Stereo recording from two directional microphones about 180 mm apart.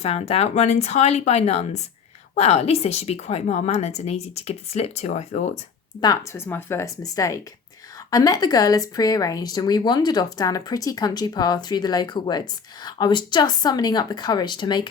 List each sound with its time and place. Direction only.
0.0 s a woman's voice: 35° left (ahead or behind)
6.0 s speech: 20° left (ahead or behind)